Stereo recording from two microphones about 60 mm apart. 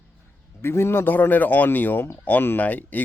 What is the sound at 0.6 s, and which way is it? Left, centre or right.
A man's voice, left.